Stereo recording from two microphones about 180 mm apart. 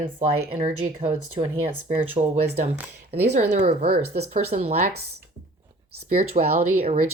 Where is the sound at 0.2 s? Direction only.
40° right (ahead or behind).